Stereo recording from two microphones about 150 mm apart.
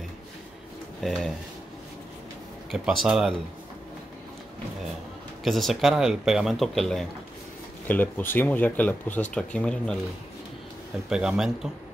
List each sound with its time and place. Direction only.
2.7 s speech: centre (ahead or behind)
5.4 s speech: centre (ahead or behind)
7.9 s speech: 15° left (ahead or behind)
11.1 s speech: 5° right (ahead or behind)